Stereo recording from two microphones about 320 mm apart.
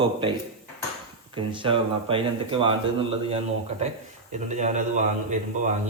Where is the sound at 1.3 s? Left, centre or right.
Centre.